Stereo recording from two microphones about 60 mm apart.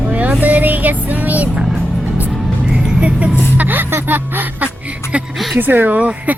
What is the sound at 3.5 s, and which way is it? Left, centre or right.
Music, right.